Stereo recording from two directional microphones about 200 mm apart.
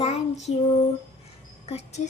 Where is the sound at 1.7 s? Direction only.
30° left (ahead or behind).